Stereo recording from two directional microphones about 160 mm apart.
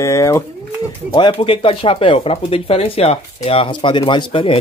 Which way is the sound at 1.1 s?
30° left (ahead or behind).